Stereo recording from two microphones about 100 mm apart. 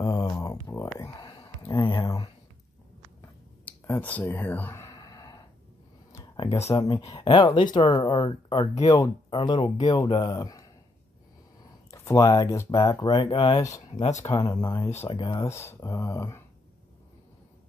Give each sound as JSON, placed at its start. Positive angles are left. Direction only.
{"t": 0.0, "sound": "a sound", "side_deg": 35}
{"t": 0.4, "sound": "speech", "side_deg": 30}
{"t": 1.2, "sound": "a sound", "side_deg": 50}
{"t": 3.2, "sound": "finger snapping", "side_deg": 25}
{"t": 4.1, "sound": "speech", "side_deg": 15}
{"t": 4.9, "sound": "gasp", "side_deg": 40}
{"t": 6.7, "sound": "speech", "side_deg": 35}
{"t": 7.2, "sound": "speech", "side_deg": 55}
{"t": 9.3, "sound": "speech", "side_deg": 55}
{"t": 11.9, "sound": "speech", "side_deg": 30}
{"t": 12.9, "sound": "speech", "side_deg": 55}
{"t": 13.6, "sound": "speech", "side_deg": 35}
{"t": 15.0, "sound": "speech", "side_deg": 50}
{"t": 15.3, "sound": "speech", "side_deg": 25}